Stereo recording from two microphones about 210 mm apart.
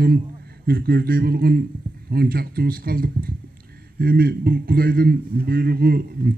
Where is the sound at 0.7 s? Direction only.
45° right (ahead or behind).